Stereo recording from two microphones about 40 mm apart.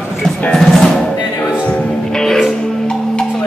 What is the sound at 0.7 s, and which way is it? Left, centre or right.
Music, centre.